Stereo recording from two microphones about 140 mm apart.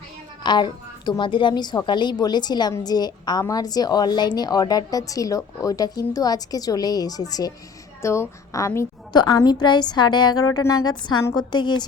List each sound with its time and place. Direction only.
0.4 s a woman's voice: 30° left (ahead or behind)